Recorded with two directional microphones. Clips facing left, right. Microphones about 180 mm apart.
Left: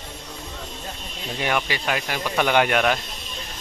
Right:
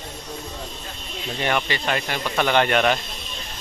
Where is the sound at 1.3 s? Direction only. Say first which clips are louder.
Right 1 dB; 10° left (ahead or behind).